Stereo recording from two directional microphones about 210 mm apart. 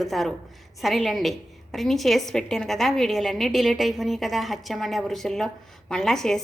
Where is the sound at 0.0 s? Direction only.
Centre (ahead or behind).